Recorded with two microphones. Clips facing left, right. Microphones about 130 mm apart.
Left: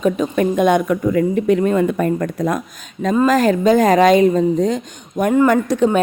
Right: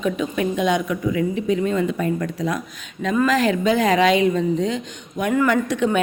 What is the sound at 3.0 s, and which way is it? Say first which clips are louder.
A woman's voice: left 4 dB; 40° left (ahead or behind).